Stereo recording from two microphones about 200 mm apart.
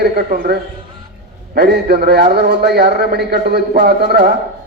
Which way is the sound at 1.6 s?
55° right (ahead or behind).